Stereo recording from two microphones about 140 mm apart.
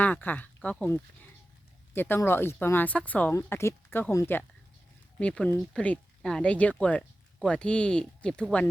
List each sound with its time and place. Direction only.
0.0 s speech: 10° left (ahead or behind)
5.2 s speech: 5° left (ahead or behind)